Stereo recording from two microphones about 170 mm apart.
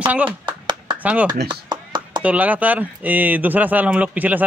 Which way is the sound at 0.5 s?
25° right (ahead or behind).